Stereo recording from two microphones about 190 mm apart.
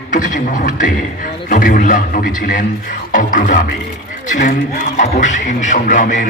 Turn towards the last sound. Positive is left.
turn(degrees=40)  # may be behind; listen again after turning